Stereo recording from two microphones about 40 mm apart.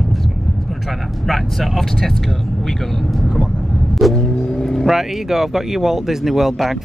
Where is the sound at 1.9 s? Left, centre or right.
Centre.